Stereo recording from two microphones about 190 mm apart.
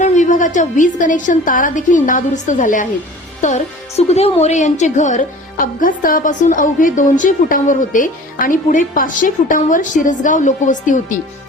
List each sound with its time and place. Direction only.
0.0 s a woman's voice: 40° left (ahead or behind)